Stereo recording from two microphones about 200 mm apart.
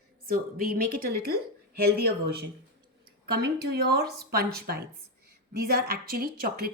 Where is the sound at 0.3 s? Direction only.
50° right (ahead or behind).